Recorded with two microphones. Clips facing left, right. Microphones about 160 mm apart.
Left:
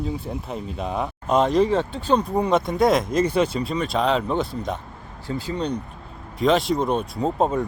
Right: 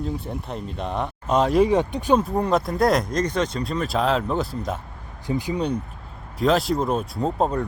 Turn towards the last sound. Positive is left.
turn(degrees=0)  # may be behind; listen again after turning